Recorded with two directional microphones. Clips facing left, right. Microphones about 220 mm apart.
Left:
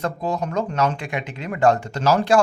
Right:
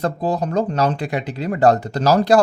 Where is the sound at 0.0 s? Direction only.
35° right (ahead or behind).